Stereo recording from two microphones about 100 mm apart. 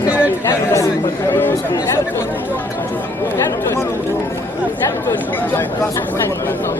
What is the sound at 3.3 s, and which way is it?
Speech, 25° left (ahead or behind).